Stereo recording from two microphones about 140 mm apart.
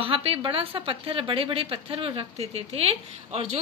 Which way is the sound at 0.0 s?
40° right (ahead or behind).